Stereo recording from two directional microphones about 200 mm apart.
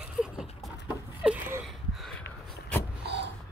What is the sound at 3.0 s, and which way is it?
Vehicle, 60° right (ahead or behind).